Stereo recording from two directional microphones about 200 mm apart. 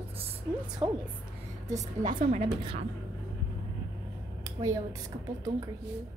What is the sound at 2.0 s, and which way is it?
Speech, 40° right (ahead or behind).